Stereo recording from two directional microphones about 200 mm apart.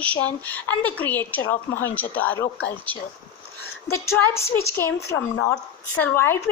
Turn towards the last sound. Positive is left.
turn(degrees=10)  # may be behind; listen again after turning